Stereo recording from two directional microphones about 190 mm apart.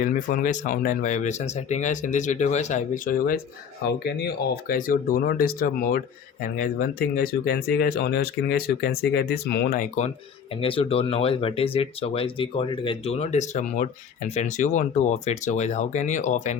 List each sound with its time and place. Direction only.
0.0 s speech: 40° left (ahead or behind)
10.6 s speech: 30° left (ahead or behind)